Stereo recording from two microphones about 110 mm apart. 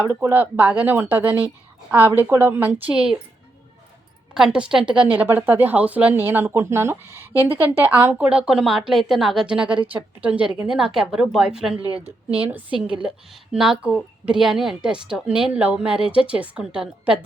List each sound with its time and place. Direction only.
0.0 s a woman's voice: 20° right (ahead or behind)
4.4 s a woman's voice: 5° right (ahead or behind)
11.9 s a woman's voice: 60° right (ahead or behind)
12.9 s a woman's voice: 10° right (ahead or behind)